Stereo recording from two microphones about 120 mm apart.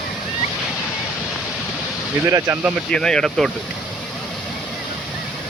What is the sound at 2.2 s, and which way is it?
Speech, 25° right (ahead or behind).